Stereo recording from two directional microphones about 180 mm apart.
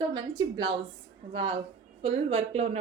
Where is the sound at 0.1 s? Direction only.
25° right (ahead or behind).